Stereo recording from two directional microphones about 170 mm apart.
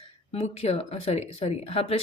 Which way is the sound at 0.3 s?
35° left (ahead or behind).